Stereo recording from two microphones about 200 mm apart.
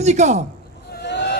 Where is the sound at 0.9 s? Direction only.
55° left (ahead or behind).